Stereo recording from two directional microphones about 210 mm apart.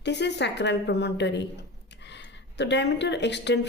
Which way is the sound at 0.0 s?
55° left (ahead or behind).